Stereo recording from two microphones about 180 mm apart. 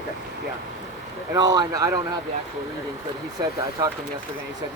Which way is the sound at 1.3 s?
20° right (ahead or behind).